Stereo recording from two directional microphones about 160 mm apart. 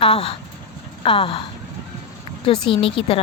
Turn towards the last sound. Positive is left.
turn(degrees=35)  # may be behind; listen again after turning